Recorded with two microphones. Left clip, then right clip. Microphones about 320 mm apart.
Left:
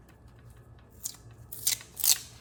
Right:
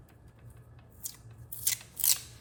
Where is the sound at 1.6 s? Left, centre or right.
Centre.